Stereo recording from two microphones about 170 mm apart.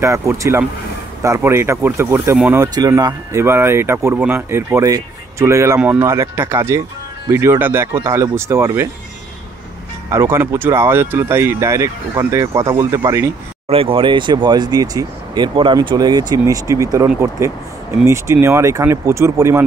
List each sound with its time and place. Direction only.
0.0 s speech: 15° right (ahead or behind)
2.6 s speech: 20° right (ahead or behind)
10.1 s speech: 15° right (ahead or behind)
13.7 s speech: 35° right (ahead or behind); by 19.6 s 15° right (ahead or behind)